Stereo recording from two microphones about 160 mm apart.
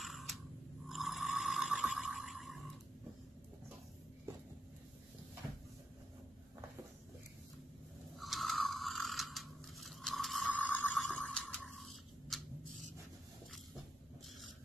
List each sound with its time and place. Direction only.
0.0 s a sound: centre (ahead or behind)
0.8 s snoring: centre (ahead or behind)
8.2 s ratchet: centre (ahead or behind)